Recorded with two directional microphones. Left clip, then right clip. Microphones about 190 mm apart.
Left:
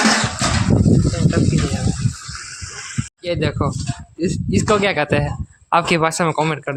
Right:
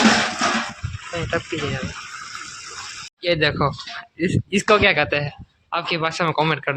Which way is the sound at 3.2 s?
5° left (ahead or behind).